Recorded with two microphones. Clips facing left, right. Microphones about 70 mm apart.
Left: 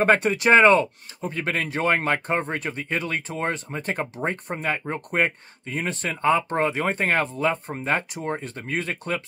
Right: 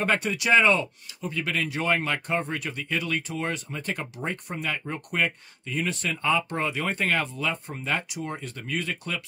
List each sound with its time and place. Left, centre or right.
0.0 s speech: left